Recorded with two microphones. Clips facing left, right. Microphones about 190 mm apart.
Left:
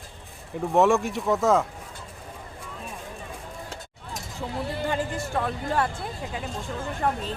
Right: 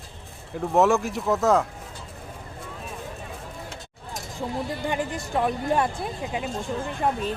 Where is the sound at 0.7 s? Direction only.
Centre (ahead or behind).